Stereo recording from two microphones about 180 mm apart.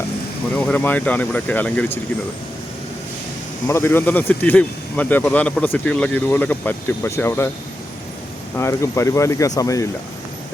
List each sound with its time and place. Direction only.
0.5 s speech: 10° left (ahead or behind)
3.7 s speech: 15° left (ahead or behind)
8.5 s speech: 15° left (ahead or behind)